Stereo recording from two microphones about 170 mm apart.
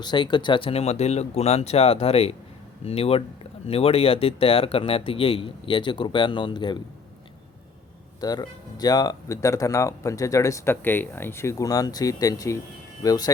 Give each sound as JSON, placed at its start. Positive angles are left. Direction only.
{"t": 0.0, "sound": "speech", "side_deg": 25}
{"t": 8.2, "sound": "speech", "side_deg": 25}